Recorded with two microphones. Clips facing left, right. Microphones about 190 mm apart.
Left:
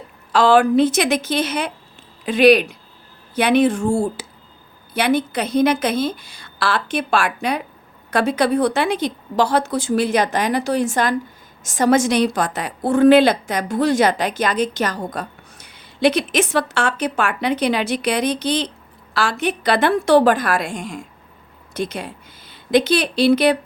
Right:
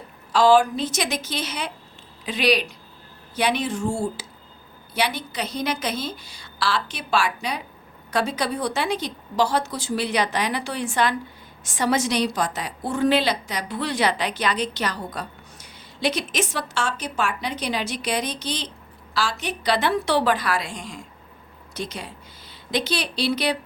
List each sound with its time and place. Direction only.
0.3 s a woman's voice: 60° left (ahead or behind)